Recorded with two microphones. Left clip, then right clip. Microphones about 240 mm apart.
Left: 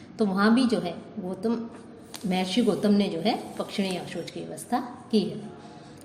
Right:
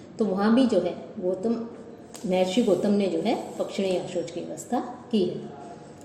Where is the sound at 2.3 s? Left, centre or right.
Left.